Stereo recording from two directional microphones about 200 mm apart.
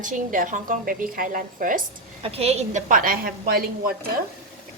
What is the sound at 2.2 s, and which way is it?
A woman's voice, 30° right (ahead or behind).